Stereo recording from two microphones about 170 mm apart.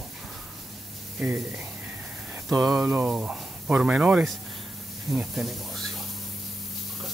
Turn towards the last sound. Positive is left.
turn(degrees=0)  # may be behind; listen again after turning